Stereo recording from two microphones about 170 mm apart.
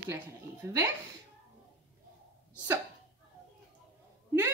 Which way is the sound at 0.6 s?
15° right (ahead or behind).